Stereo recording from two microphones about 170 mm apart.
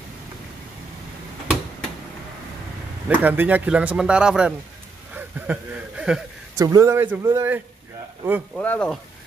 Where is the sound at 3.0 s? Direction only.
10° right (ahead or behind).